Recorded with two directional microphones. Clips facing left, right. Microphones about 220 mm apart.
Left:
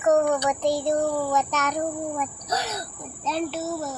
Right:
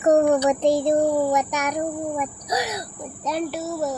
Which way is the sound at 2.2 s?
15° right (ahead or behind).